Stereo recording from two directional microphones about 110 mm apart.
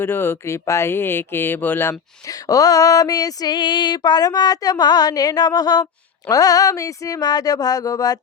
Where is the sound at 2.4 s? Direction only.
35° left (ahead or behind).